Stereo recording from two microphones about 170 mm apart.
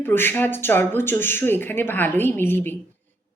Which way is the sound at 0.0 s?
10° left (ahead or behind).